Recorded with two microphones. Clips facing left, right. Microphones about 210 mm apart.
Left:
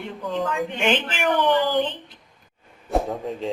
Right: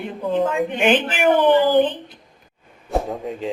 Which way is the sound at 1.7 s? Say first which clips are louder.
Right 7 dB; 50° right (ahead or behind).